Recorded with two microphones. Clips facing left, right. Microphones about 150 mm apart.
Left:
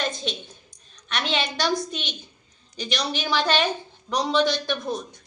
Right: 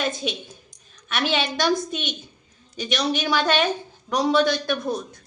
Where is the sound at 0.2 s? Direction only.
5° right (ahead or behind).